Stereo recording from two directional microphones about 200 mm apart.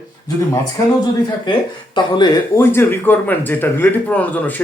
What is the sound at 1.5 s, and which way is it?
Speech, 20° left (ahead or behind).